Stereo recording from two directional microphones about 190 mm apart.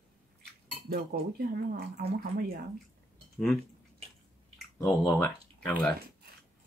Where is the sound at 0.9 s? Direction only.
50° right (ahead or behind).